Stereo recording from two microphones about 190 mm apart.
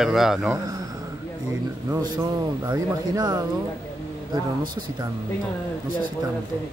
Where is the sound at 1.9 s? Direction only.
20° right (ahead or behind).